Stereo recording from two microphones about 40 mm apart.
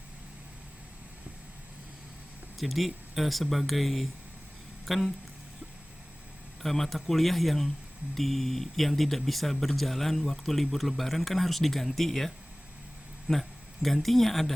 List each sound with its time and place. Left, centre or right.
2.6 s speech: centre
6.6 s speech: centre
13.3 s speech: centre
13.8 s speech: centre